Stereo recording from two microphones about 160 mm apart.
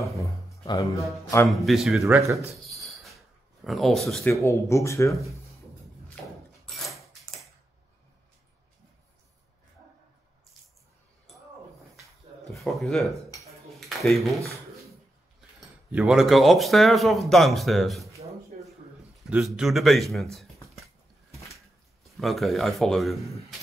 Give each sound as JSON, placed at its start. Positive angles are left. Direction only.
{"t": 0.7, "sound": "a man's voice", "side_deg": 20}
{"t": 1.5, "sound": "speech", "side_deg": 0}
{"t": 2.0, "sound": "speech", "side_deg": -15}
{"t": 2.7, "sound": "a sound", "side_deg": 0}
{"t": 3.6, "sound": "speech", "side_deg": 0}
{"t": 4.3, "sound": "speech", "side_deg": 20}
{"t": 6.6, "sound": "a sound", "side_deg": 0}
{"t": 12.5, "sound": "speech", "side_deg": 0}
{"t": 13.7, "sound": "a sound", "side_deg": 0}
{"t": 15.9, "sound": "speech", "side_deg": -5}
{"t": 19.2, "sound": "speech", "side_deg": -5}
{"t": 21.5, "sound": "speech", "side_deg": 0}